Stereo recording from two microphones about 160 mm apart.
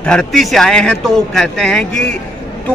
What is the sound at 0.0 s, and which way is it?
A man's voice, 5° left (ahead or behind).